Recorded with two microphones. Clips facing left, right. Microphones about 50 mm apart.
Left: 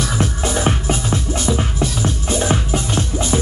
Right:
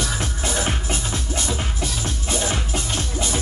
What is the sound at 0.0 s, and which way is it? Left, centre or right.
Music, left.